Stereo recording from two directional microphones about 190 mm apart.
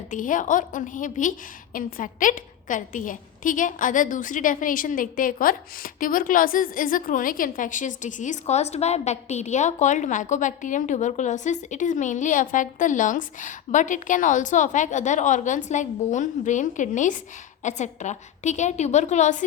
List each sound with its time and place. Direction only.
0.1 s a woman's voice: 45° left (ahead or behind)